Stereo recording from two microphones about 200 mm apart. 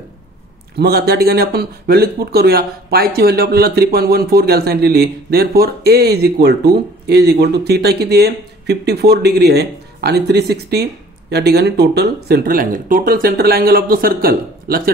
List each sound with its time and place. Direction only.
0.7 s speech: 50° right (ahead or behind)